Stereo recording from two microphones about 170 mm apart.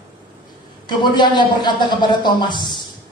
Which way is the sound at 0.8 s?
25° left (ahead or behind).